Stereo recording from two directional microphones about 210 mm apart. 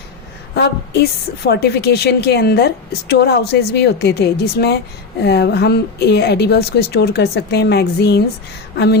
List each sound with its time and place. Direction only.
0.5 s a woman's voice: 50° left (ahead or behind)